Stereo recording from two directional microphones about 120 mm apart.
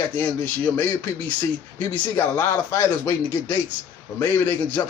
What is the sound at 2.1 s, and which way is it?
A man's voice, 20° left (ahead or behind).